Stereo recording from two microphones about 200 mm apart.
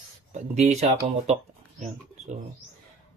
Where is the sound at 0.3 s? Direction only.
35° right (ahead or behind).